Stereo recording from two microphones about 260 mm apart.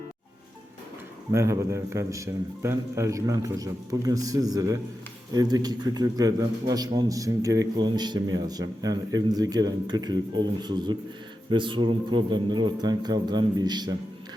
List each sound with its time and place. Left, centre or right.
1.3 s a man's voice: centre